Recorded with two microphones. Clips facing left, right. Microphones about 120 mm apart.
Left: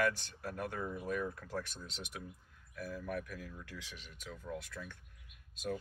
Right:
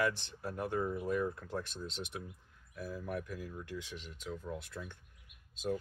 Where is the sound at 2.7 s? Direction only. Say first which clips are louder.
Right 1 dB; 25° right (ahead or behind).